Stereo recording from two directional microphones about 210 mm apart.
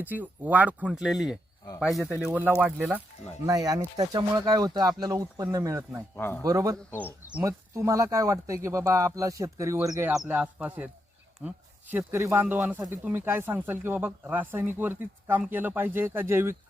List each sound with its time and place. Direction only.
0.0 s speech: 10° right (ahead or behind)
6.1 s a man's voice: 10° left (ahead or behind)
6.4 s speech: 15° right (ahead or behind)